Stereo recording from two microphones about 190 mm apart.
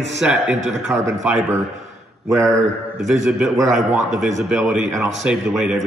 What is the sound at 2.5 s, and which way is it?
A man's voice, centre (ahead or behind).